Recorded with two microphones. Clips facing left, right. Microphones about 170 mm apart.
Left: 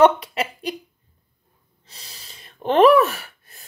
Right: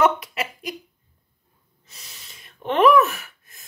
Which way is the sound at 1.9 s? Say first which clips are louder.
Left 2 dB; 35° left (ahead or behind).